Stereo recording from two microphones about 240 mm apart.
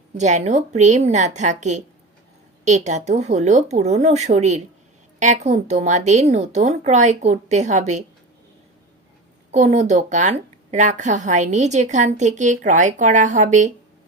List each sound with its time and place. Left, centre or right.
0.2 s speech: right
9.5 s speech: right